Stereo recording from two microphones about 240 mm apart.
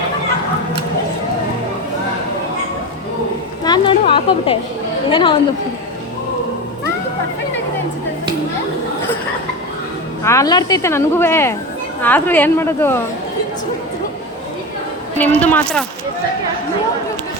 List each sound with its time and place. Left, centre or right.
3.6 s a sound: centre
5.0 s a woman's voice: left
10.2 s speech: centre
15.2 s a woman's voice: centre